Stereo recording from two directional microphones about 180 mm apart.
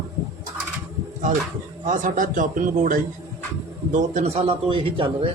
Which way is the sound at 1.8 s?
45° right (ahead or behind).